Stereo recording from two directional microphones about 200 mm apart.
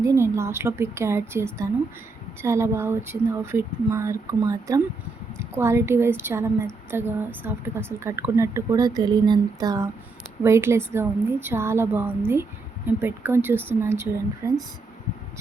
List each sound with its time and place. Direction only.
0.0 s a woman's voice: 15° right (ahead or behind)